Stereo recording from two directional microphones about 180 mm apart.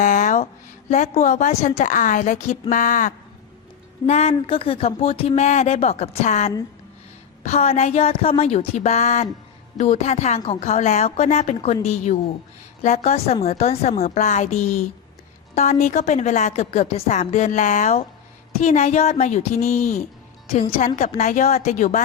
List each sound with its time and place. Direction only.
0.0 s a sound: 45° left (ahead or behind)
0.9 s a woman's voice: 40° left (ahead or behind)
4.0 s speech: 35° left (ahead or behind)